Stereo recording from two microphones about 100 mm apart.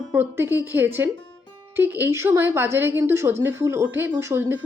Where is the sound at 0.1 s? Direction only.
20° right (ahead or behind).